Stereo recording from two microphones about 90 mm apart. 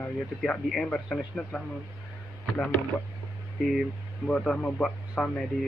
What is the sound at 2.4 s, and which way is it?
Speech, 20° left (ahead or behind).